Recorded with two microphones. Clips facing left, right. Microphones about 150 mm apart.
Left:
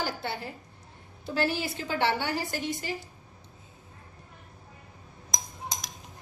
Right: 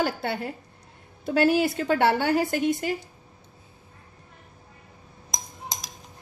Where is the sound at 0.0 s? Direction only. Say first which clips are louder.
Right 6 dB; 55° right (ahead or behind).